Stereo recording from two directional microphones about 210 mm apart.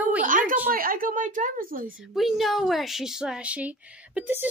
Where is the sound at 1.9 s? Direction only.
Centre (ahead or behind).